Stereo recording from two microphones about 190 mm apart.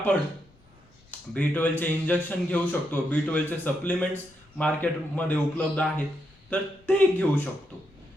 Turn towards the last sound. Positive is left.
turn(degrees=5)  # may be behind; listen again after turning